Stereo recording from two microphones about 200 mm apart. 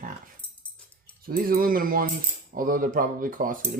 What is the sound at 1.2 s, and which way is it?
Speech, 45° right (ahead or behind).